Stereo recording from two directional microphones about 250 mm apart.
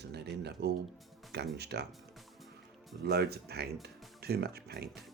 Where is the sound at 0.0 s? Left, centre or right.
Right.